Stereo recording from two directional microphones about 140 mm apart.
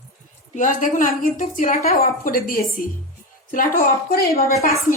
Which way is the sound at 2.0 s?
90° left.